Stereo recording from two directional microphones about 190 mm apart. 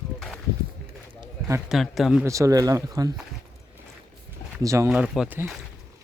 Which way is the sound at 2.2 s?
15° right (ahead or behind).